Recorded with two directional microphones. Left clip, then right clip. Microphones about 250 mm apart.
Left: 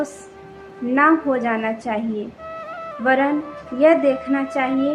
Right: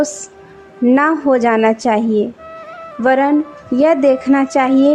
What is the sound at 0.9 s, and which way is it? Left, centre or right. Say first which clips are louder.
Speech: right 2 dB; right.